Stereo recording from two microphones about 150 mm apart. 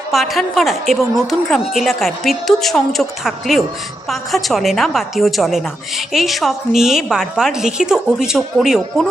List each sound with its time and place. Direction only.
0.1 s a woman's voice: centre (ahead or behind)